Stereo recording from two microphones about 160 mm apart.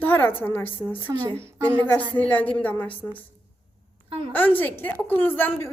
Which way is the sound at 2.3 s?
10° left (ahead or behind).